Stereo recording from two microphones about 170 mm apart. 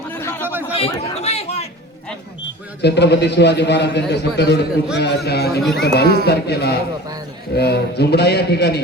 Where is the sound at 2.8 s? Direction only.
85° left.